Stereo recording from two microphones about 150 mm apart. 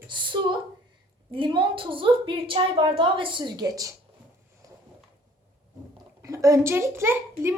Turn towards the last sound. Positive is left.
turn(degrees=-15)  # may be behind; listen again after turning